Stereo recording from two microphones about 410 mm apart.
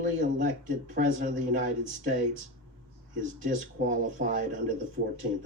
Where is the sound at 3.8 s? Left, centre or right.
Centre.